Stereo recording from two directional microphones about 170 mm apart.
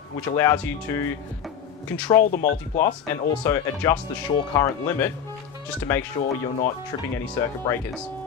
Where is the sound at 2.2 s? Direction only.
55° left (ahead or behind).